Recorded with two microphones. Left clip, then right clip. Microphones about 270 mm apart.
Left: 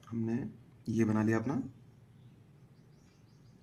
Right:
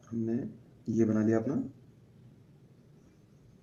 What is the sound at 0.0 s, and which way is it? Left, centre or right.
Speech, left.